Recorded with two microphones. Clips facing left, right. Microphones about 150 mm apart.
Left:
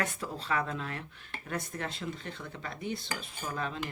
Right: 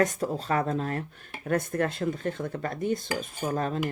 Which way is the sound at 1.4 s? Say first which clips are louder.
Right 11 dB; 50° right (ahead or behind).